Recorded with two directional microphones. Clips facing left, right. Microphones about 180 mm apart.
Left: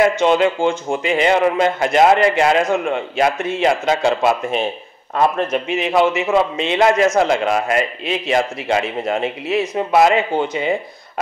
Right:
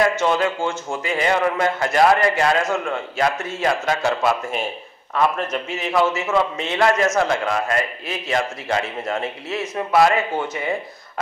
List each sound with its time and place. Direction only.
0.0 s a man's voice: 20° left (ahead or behind)